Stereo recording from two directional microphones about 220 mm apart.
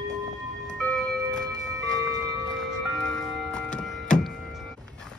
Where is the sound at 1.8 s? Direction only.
15° right (ahead or behind).